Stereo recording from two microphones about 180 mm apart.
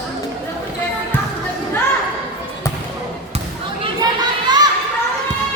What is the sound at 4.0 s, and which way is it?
Children playing, 25° right (ahead or behind).